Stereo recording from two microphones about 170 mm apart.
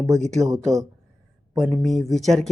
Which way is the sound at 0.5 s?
20° right (ahead or behind).